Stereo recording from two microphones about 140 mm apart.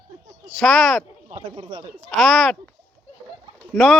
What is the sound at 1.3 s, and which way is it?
Speech, 35° right (ahead or behind).